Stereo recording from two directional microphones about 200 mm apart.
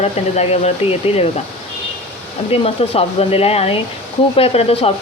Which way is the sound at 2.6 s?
30° left (ahead or behind).